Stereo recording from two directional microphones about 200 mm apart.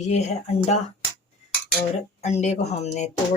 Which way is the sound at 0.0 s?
35° left (ahead or behind).